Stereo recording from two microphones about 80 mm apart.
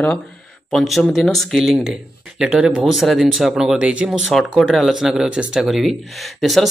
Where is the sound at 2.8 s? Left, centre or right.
Centre.